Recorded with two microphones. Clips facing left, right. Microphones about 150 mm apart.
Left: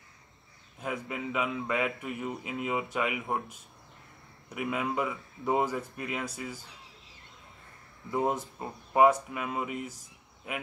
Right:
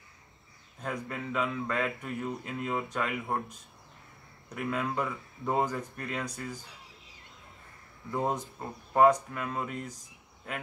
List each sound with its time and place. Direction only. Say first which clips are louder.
0.7 s a man's voice: left 1 dB; 5° left (ahead or behind)
4.6 s a man's voice: left 1 dB; 10° left (ahead or behind)
8.1 s a man's voice: left 2 dB; 5° left (ahead or behind)